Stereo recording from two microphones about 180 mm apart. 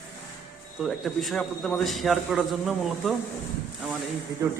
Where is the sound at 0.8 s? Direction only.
Centre (ahead or behind).